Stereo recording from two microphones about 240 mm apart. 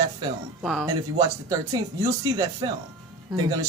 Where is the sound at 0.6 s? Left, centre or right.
Centre.